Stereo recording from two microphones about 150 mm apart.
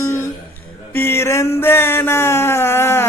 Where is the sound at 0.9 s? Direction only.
15° left (ahead or behind).